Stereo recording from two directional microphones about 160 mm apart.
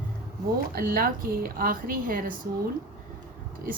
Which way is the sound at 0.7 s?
65° right (ahead or behind).